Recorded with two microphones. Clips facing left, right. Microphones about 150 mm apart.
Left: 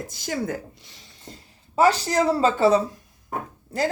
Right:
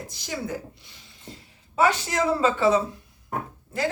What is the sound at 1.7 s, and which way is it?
Speech, 35° left (ahead or behind).